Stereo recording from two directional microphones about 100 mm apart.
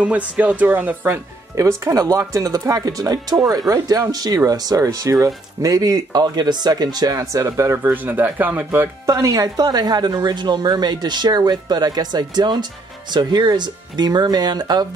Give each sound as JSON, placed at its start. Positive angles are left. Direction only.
{"t": 0.0, "sound": "speech", "side_deg": -15}
{"t": 1.5, "sound": "speech", "side_deg": -30}
{"t": 7.8, "sound": "speech", "side_deg": -15}
{"t": 9.1, "sound": "speech", "side_deg": -35}